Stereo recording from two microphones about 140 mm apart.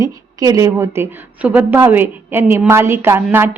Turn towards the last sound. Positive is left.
turn(degrees=-15)  # may be behind; listen again after turning